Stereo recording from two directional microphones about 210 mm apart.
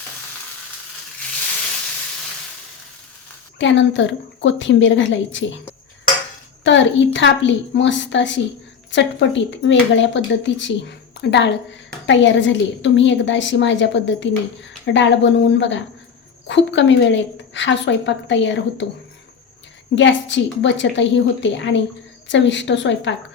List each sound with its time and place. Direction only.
3.6 s a woman's voice: 60° left (ahead or behind)
6.7 s a woman's voice: 60° left (ahead or behind)
20.0 s a woman's voice: 60° left (ahead or behind)